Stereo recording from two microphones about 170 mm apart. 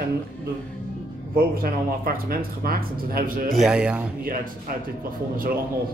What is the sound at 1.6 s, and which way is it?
Speech, 60° right (ahead or behind).